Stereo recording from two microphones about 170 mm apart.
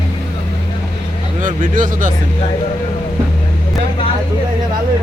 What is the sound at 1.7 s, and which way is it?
Speech, 50° right (ahead or behind).